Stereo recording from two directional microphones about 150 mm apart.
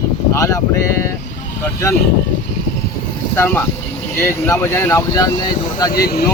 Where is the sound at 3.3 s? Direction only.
15° left (ahead or behind).